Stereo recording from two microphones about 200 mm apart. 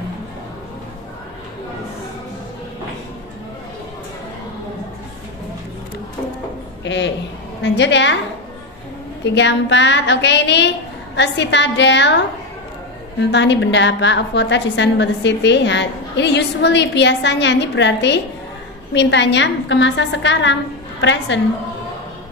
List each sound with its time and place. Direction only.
6.8 s a sound: 65° left (ahead or behind)
7.6 s a woman's voice: 60° left (ahead or behind)
9.2 s a woman's voice: 60° left (ahead or behind)
13.2 s a woman's voice: 60° left (ahead or behind)